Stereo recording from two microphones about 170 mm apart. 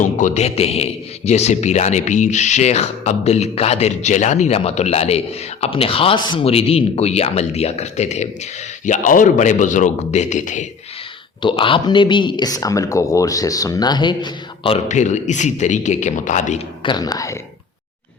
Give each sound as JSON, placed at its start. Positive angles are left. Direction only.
{"t": 0.0, "sound": "a man's voice", "side_deg": 45}
{"t": 11.4, "sound": "speech", "side_deg": 30}
{"t": 16.8, "sound": "speech", "side_deg": 25}